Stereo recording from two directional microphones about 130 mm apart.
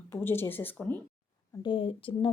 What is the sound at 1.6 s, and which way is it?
Speech, 40° left (ahead or behind).